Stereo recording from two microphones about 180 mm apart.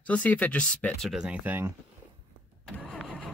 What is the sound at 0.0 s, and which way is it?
Speech, 10° left (ahead or behind).